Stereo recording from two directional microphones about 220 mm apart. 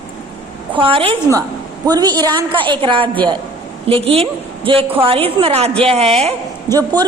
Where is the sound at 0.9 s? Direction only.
25° right (ahead or behind).